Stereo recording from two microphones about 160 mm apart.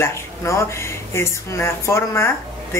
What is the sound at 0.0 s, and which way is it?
Speech, 15° left (ahead or behind).